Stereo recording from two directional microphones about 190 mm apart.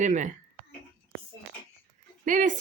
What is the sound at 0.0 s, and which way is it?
Speech, 40° right (ahead or behind).